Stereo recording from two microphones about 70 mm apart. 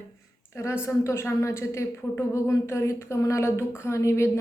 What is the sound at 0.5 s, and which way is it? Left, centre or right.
A woman's voice, left.